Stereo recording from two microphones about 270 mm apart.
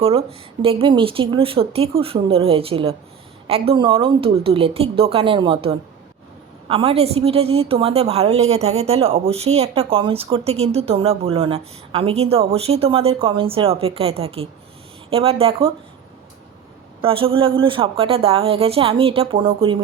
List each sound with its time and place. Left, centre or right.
0.0 s a woman's voice: right
17.0 s a woman's voice: centre